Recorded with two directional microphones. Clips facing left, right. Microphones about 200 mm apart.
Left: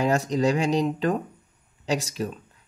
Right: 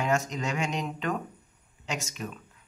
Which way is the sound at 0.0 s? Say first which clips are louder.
Left 7 dB; 35° left (ahead or behind).